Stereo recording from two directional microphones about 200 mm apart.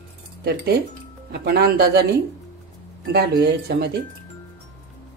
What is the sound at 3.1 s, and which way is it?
Speech, 55° right (ahead or behind).